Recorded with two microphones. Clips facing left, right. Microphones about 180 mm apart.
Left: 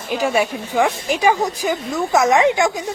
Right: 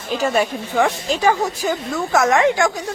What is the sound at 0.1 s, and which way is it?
A woman's voice, 10° left (ahead or behind).